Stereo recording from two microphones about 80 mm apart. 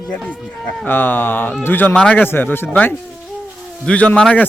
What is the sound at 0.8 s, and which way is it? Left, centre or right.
Speech, left.